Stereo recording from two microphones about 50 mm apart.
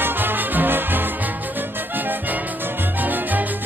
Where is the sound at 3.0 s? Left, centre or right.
Right.